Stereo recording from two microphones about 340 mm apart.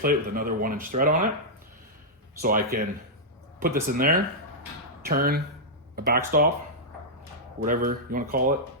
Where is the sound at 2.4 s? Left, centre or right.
Right.